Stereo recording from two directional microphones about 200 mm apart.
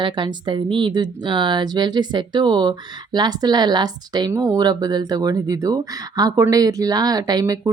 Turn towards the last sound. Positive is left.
turn(degrees=-20)  # may be behind; listen again after turning